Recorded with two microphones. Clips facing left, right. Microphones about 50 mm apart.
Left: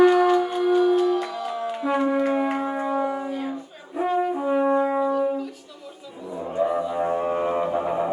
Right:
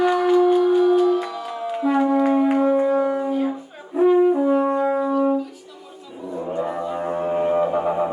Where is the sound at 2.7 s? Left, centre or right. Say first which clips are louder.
Right 6 dB; centre.